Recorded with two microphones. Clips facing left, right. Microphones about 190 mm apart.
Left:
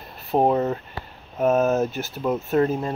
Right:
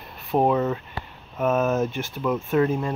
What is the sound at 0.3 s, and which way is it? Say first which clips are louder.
Speech: left 1 dB; 30° left (ahead or behind).